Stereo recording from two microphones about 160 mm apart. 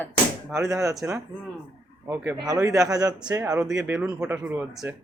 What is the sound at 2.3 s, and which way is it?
Speech, 20° right (ahead or behind).